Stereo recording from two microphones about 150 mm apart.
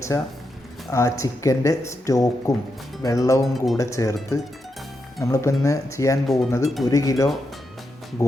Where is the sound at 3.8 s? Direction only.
20° left (ahead or behind).